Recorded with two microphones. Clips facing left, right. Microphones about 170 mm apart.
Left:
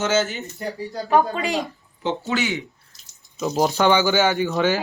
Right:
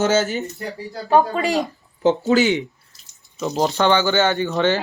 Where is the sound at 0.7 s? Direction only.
Centre (ahead or behind).